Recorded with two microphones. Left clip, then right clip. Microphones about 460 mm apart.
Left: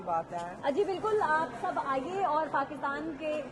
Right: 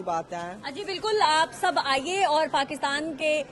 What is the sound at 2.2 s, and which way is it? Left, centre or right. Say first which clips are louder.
Speech: right 6 dB; right.